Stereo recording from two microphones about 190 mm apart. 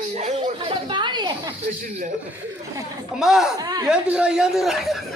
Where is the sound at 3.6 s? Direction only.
20° right (ahead or behind).